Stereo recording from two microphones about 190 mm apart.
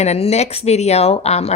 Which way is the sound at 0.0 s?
35° left (ahead or behind).